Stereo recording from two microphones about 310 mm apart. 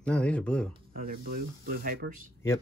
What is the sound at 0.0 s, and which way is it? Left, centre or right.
Speech, centre.